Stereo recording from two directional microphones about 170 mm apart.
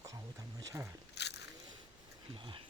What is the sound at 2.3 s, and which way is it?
Speech, 30° right (ahead or behind).